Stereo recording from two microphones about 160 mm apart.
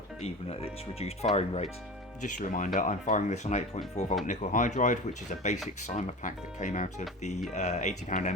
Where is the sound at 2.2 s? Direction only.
50° left (ahead or behind).